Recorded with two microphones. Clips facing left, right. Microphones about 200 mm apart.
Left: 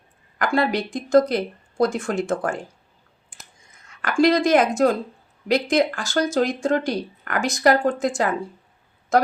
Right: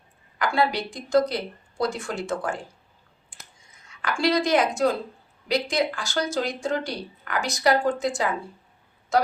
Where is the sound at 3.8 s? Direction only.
50° left (ahead or behind).